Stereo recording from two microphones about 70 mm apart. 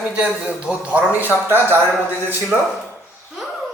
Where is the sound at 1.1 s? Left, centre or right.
Right.